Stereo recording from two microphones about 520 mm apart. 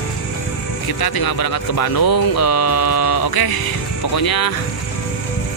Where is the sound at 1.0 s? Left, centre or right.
Left.